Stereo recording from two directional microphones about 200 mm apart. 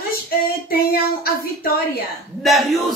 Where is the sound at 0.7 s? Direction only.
50° left (ahead or behind).